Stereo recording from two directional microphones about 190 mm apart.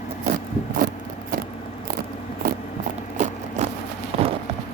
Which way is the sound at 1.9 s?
50° right (ahead or behind).